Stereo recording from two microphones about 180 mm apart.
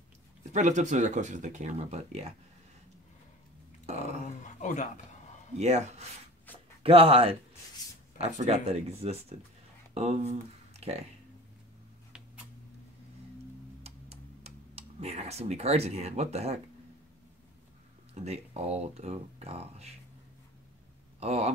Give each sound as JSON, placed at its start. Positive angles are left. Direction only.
{"t": 0.5, "sound": "speech", "side_deg": -40}
{"t": 3.9, "sound": "a sound", "side_deg": -35}
{"t": 4.6, "sound": "a sound", "side_deg": 40}
{"t": 5.6, "sound": "speech", "side_deg": -35}
{"t": 13.8, "sound": "computer keyboard", "side_deg": -35}
{"t": 18.1, "sound": "speech", "side_deg": -35}
{"t": 21.2, "sound": "speech", "side_deg": -35}